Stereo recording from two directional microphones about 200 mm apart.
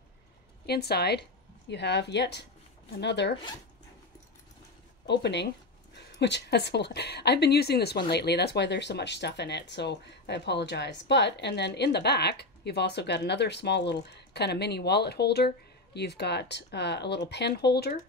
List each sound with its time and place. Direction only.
0.7 s speech: 55° left (ahead or behind)
5.0 s speech: 60° left (ahead or behind)